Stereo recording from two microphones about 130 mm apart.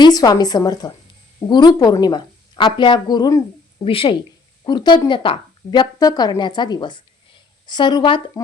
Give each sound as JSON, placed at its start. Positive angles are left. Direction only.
{"t": 0.0, "sound": "a woman's voice", "side_deg": 30}
{"t": 3.8, "sound": "speech", "side_deg": 45}